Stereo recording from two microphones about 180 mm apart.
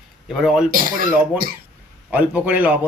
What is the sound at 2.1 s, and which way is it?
Speech, 10° right (ahead or behind).